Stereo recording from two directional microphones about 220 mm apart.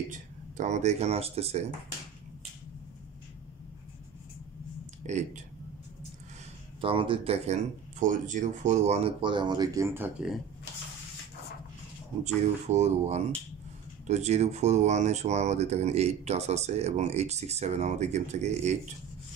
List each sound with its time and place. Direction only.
0.1 s speech: 35° right (ahead or behind)
5.0 s speech: 30° right (ahead or behind)
6.8 s speech: 25° right (ahead or behind); by 10.4 s 5° right (ahead or behind)
12.6 s speech: 30° right (ahead or behind)